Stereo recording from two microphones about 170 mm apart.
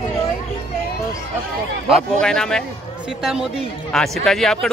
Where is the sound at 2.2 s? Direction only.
5° left (ahead or behind).